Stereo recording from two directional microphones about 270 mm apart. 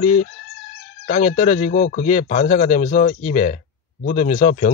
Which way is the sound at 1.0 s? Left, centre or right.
Left.